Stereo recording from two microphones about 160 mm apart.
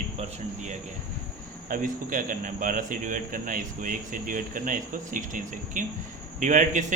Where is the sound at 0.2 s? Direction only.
50° right (ahead or behind).